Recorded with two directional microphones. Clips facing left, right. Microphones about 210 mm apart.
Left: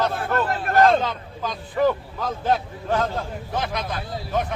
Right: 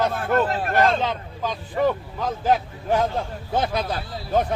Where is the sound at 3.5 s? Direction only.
30° right (ahead or behind).